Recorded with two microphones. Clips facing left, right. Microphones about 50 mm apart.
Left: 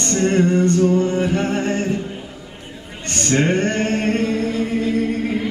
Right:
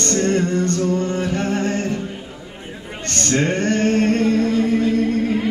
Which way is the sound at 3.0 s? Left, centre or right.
Centre.